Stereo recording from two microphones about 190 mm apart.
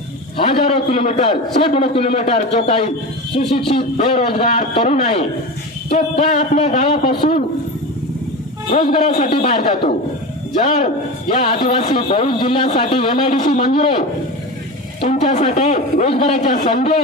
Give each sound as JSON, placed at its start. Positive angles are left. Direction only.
{"t": 0.4, "sound": "a man's voice", "side_deg": 30}
{"t": 8.6, "sound": "a man's voice", "side_deg": 50}
{"t": 12.6, "sound": "a man's voice", "side_deg": 40}
{"t": 16.4, "sound": "a man's voice", "side_deg": 45}